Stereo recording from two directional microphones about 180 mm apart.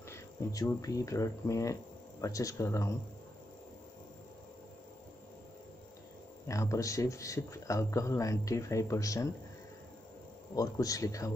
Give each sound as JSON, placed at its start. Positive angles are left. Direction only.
{"t": 0.1, "sound": "speech", "side_deg": 15}
{"t": 6.4, "sound": "speech", "side_deg": 15}
{"t": 10.5, "sound": "speech", "side_deg": 20}